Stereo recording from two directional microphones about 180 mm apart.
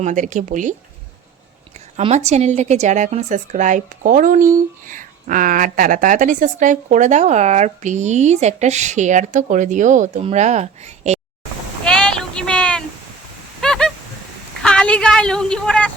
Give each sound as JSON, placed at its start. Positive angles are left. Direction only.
{"t": 0.0, "sound": "speech", "side_deg": -45}
{"t": 2.0, "sound": "a woman's voice", "side_deg": -35}
{"t": 11.9, "sound": "a sound", "side_deg": 5}